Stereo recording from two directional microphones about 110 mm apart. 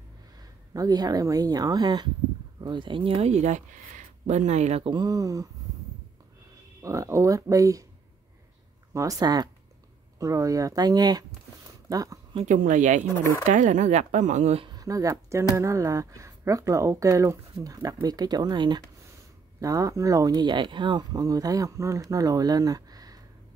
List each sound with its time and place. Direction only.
0.4 s speech: 35° right (ahead or behind); by 4.8 s 90° right
4.8 s speech: 40° right (ahead or behind)
6.8 s speech: 30° right (ahead or behind)
8.9 s speech: 30° right (ahead or behind)
12.4 s speech: 90° right
14.7 s speech: 30° right (ahead or behind)